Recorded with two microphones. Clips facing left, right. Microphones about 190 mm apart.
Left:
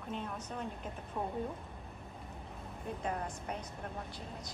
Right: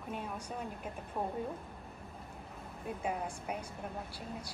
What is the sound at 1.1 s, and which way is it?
Speech, 25° right (ahead or behind).